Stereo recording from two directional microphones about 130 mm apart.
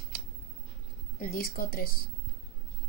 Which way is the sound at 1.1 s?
90° left.